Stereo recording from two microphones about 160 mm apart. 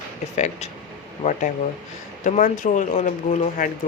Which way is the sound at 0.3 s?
45° left (ahead or behind).